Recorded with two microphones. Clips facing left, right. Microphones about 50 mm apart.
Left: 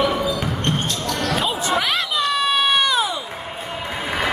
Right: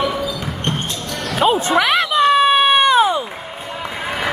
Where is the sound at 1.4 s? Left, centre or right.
Right.